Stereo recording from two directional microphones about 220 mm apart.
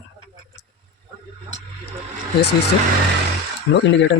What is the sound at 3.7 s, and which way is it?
Speech, 60° left (ahead or behind).